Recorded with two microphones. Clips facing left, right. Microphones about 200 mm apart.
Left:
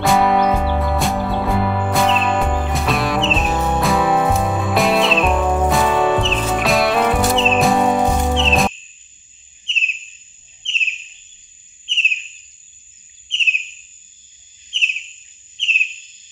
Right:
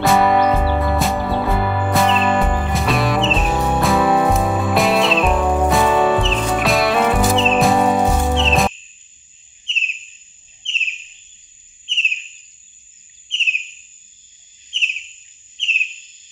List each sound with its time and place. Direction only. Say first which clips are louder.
0.0 s music: right 1 dB; centre (ahead or behind)
9.7 s bird vocalization: left 2 dB; 65° left (ahead or behind)
10.6 s bird: left 2 dB; 65° left (ahead or behind)
13.4 s bird vocalization: left 2 dB; 65° left (ahead or behind)
14.7 s a sound: left 1 dB; 65° left (ahead or behind)